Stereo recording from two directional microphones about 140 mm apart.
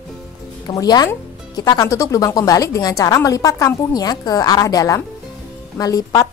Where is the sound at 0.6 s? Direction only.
30° left (ahead or behind).